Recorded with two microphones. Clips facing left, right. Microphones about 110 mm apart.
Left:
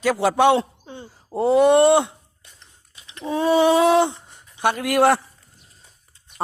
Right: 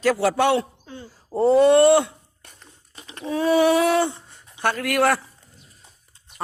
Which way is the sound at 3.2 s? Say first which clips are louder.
Left 1 dB; 25° left (ahead or behind).